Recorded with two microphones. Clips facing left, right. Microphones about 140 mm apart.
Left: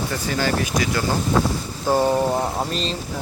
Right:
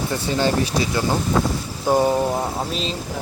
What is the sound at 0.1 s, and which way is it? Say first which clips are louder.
Speech: right 4 dB; 25° right (ahead or behind).